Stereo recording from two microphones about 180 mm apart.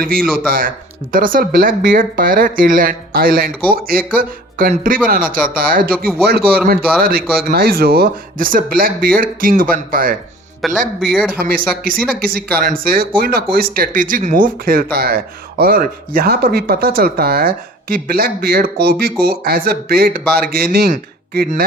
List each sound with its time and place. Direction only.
0.0 s speech: 55° right (ahead or behind)
10.6 s speech: centre (ahead or behind)
11.3 s speech: 55° right (ahead or behind)